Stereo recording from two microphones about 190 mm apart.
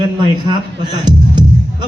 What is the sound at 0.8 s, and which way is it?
Music, 25° right (ahead or behind).